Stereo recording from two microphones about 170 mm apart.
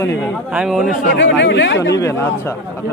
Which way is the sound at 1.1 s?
90° left.